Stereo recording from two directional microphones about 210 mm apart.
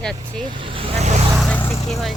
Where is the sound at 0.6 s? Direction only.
30° right (ahead or behind).